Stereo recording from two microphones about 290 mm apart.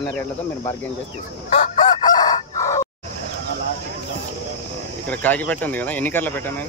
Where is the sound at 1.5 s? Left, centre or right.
Left.